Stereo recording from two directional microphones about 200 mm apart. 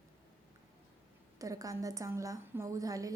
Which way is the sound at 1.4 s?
15° right (ahead or behind).